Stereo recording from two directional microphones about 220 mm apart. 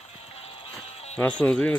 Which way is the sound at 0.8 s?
30° left (ahead or behind).